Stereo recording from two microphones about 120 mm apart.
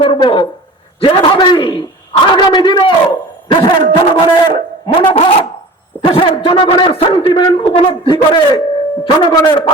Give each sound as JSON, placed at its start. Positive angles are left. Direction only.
{"t": 0.0, "sound": "a man's voice", "side_deg": 45}